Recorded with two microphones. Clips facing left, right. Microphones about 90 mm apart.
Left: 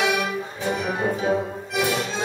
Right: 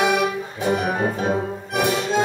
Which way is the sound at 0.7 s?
45° right (ahead or behind).